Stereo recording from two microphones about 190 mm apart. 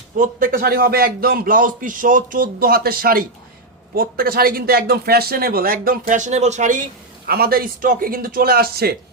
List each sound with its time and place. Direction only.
0.2 s speech: 45° right (ahead or behind)
7.3 s speech: 55° right (ahead or behind)